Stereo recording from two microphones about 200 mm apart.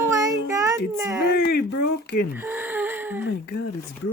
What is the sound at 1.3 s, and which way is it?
Speech, 50° left (ahead or behind).